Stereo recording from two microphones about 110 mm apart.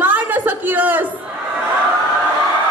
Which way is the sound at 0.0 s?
15° right (ahead or behind).